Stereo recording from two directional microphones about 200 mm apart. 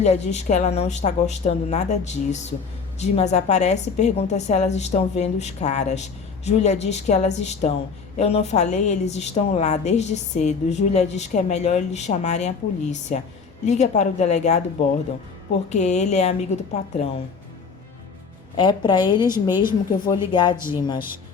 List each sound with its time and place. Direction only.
0.0 s a woman's voice: 35° left (ahead or behind)
15.7 s a woman's voice: 35° left (ahead or behind)
18.5 s a woman's voice: 25° left (ahead or behind)
20.6 s speech: 10° right (ahead or behind)